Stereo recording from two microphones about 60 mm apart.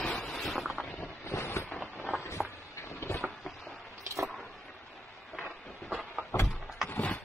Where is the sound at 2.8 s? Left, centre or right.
Left.